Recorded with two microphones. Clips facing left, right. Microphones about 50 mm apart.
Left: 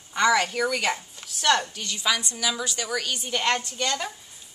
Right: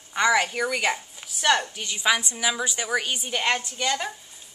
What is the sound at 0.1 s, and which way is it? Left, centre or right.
A woman's voice, centre.